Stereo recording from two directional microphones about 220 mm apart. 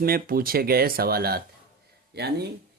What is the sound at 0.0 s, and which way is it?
Speech, 40° right (ahead or behind).